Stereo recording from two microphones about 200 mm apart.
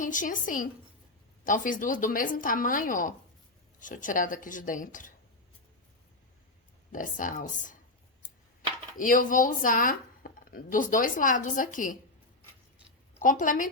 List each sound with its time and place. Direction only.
0.0 s a woman's voice: 40° left (ahead or behind)
6.9 s speech: 40° left (ahead or behind)
9.0 s speech: 40° left (ahead or behind)
13.2 s speech: 40° left (ahead or behind)